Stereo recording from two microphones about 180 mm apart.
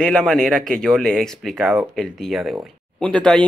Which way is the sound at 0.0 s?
5° left (ahead or behind).